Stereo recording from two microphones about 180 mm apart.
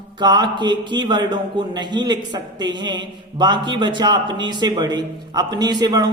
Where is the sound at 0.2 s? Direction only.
25° right (ahead or behind).